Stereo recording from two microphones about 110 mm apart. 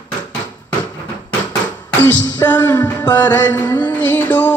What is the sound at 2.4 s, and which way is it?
Music, 30° left (ahead or behind).